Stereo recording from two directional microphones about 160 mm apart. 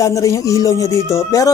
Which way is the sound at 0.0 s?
20° left (ahead or behind).